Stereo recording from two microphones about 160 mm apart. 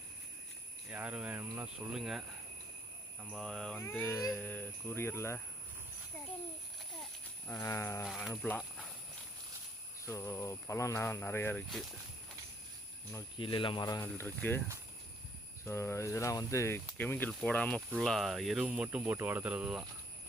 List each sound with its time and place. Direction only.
0.9 s speech: 10° right (ahead or behind)
3.2 s speech: 5° left (ahead or behind)
4.2 s speech: centre (ahead or behind)
4.4 s speech: 10° left (ahead or behind)
7.5 s speech: 15° left (ahead or behind)
8.0 s speech: centre (ahead or behind)
10.1 s speech: 20° left (ahead or behind)
13.4 s speech: 30° left (ahead or behind)
14.0 s speech: 15° left (ahead or behind)
15.6 s speech: 15° left (ahead or behind); by 19.8 s 10° right (ahead or behind)